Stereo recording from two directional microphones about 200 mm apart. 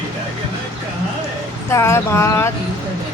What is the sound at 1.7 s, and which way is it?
Speech, 15° left (ahead or behind).